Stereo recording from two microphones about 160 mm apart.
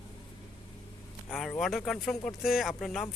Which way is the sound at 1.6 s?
Centre (ahead or behind).